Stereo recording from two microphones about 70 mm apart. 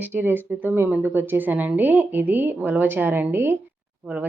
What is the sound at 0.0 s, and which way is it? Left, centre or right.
A woman's voice, right.